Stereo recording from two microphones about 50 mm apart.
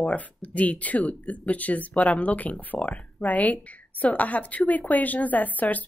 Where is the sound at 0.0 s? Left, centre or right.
Left.